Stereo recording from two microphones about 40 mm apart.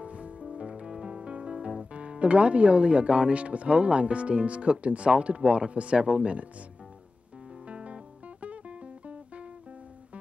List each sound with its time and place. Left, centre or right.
0.0 s music: right
1.7 s speech: right
7.6 s music: right